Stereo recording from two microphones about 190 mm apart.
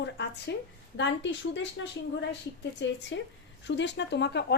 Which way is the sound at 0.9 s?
70° left (ahead or behind).